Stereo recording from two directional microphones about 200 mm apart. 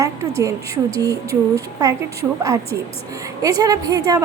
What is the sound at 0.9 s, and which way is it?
A woman's voice, 15° right (ahead or behind).